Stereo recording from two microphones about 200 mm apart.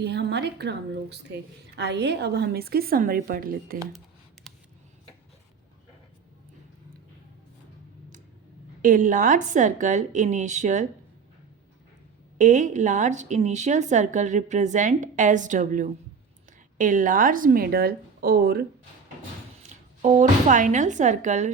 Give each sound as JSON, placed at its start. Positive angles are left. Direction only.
{"t": 0.0, "sound": "a woman's voice", "side_deg": -55}
{"t": 4.4, "sound": "a sound", "side_deg": 0}
{"t": 8.8, "sound": "a woman's voice", "side_deg": -40}
{"t": 12.4, "sound": "a woman's voice", "side_deg": -40}
{"t": 19.6, "sound": "speech", "side_deg": -35}